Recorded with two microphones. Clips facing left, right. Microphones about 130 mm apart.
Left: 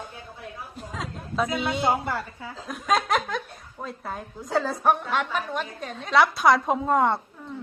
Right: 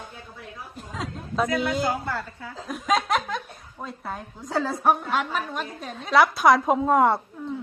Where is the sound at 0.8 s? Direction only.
Centre (ahead or behind).